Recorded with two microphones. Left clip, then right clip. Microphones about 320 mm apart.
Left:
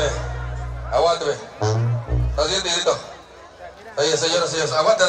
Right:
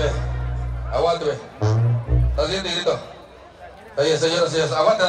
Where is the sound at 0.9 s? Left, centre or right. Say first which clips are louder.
Left 2 dB; left.